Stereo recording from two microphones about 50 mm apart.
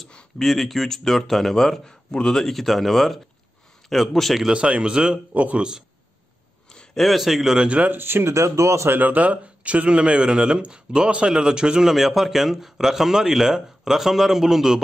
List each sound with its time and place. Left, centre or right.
0.4 s speech: centre
4.5 s speech: right
5.3 s speech: right
5.6 s speech: centre
6.7 s a sound: centre
7.0 s speech: centre
7.6 s speech: right
7.9 s speech: right
8.3 s speech: right
8.8 s speech: right; by 14.8 s centre